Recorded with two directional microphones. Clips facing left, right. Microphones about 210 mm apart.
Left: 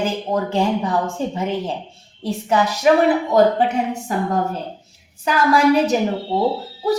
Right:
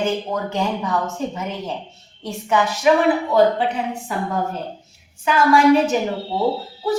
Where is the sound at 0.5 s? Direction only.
30° left (ahead or behind).